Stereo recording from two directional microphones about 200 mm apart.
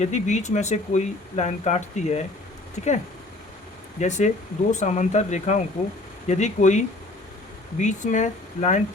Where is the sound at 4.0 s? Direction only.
35° left (ahead or behind).